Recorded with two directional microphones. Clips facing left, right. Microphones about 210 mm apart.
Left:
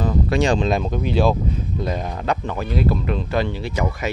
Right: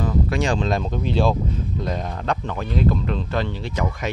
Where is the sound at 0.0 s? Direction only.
25° left (ahead or behind).